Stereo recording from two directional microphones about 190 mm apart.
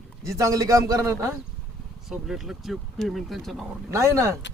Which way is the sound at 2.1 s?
Centre (ahead or behind).